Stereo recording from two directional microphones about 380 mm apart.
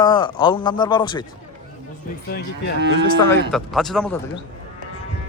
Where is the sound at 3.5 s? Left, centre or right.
Centre.